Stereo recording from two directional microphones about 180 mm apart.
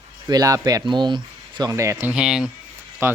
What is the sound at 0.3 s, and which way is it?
Speech, 20° right (ahead or behind).